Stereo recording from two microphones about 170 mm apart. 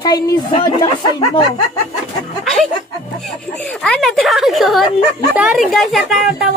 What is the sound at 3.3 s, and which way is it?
A woman's voice, centre (ahead or behind).